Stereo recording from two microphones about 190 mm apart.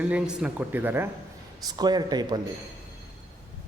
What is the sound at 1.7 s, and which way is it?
Speech, 20° right (ahead or behind).